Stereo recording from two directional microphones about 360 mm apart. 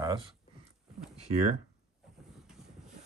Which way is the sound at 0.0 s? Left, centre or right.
Centre.